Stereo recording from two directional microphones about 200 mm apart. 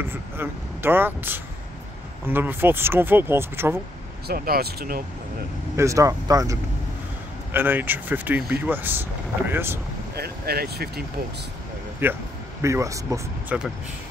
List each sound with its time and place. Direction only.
0.0 s speech: 10° right (ahead or behind)
4.3 s speech: 50° right (ahead or behind)
5.8 s speech: 15° right (ahead or behind)
10.1 s speech: 50° right (ahead or behind)
12.0 s speech: 10° right (ahead or behind)